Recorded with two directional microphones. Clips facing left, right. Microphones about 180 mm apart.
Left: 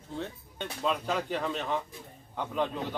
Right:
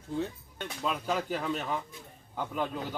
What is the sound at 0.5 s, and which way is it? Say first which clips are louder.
Speech: left 3 dB; 5° right (ahead or behind).